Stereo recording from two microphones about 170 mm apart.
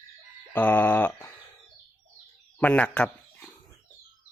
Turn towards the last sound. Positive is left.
turn(degrees=5)  # may be behind; listen again after turning